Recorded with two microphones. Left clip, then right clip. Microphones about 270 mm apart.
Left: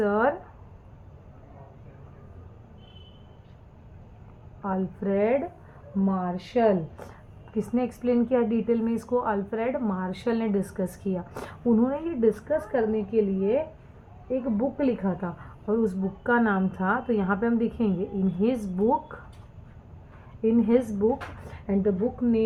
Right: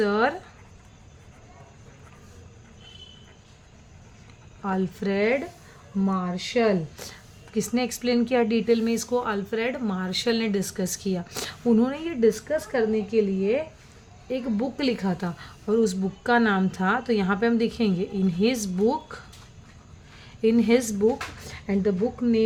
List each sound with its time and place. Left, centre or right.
0.0 s a sound: right
4.6 s speech: right
14.3 s speech: right
20.4 s speech: right